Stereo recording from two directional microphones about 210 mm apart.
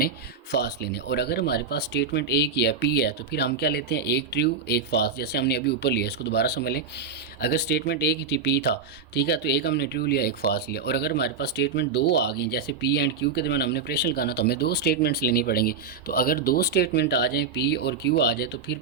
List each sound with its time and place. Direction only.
0.5 s speech: 50° left (ahead or behind)